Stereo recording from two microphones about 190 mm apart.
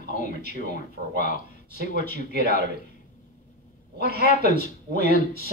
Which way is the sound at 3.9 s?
55° right (ahead or behind).